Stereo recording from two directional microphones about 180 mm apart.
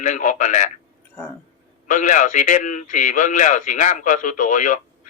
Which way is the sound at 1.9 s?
45° left (ahead or behind).